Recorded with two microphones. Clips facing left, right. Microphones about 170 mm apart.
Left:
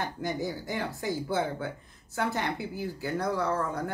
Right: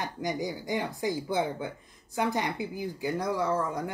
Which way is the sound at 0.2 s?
15° right (ahead or behind).